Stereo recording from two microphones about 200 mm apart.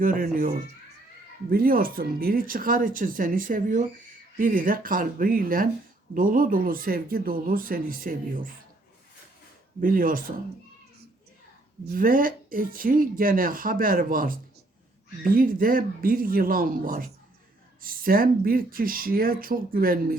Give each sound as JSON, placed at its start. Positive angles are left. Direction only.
{"t": 0.0, "sound": "speech", "side_deg": -45}
{"t": 9.8, "sound": "speech", "side_deg": -45}
{"t": 11.9, "sound": "speech", "side_deg": -45}